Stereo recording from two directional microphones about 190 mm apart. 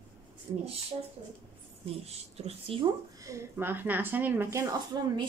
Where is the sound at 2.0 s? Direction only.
35° right (ahead or behind).